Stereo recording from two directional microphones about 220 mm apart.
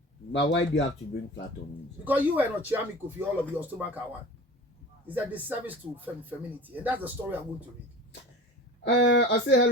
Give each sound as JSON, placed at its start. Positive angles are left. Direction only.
{"t": 0.3, "sound": "speech", "side_deg": 55}
{"t": 2.0, "sound": "speech", "side_deg": -5}
{"t": 5.0, "sound": "speech", "side_deg": -5}
{"t": 8.8, "sound": "speech", "side_deg": 50}